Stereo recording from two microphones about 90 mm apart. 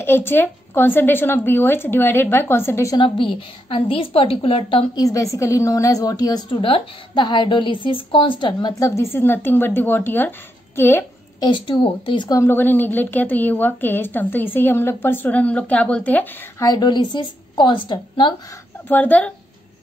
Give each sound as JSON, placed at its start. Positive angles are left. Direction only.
{"t": 0.0, "sound": "a woman's voice", "side_deg": 25}
{"t": 3.0, "sound": "a woman's voice", "side_deg": 80}
{"t": 4.9, "sound": "a woman's voice", "side_deg": 40}
{"t": 6.6, "sound": "a woman's voice", "side_deg": 70}
{"t": 8.7, "sound": "a woman's voice", "side_deg": 35}
{"t": 11.3, "sound": "a woman's voice", "side_deg": 60}
{"t": 12.4, "sound": "a woman's voice", "side_deg": 20}
{"t": 16.5, "sound": "a woman's voice", "side_deg": 45}
{"t": 18.9, "sound": "speech", "side_deg": 15}